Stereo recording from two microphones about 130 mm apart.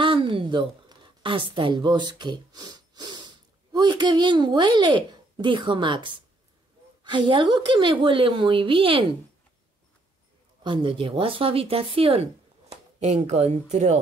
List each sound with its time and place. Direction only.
0.0 s a woman's voice: 40° right (ahead or behind)
10.6 s speech: 40° right (ahead or behind); by 13.9 s 60° right (ahead or behind)